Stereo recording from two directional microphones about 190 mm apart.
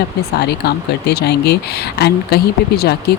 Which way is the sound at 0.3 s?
60° left (ahead or behind).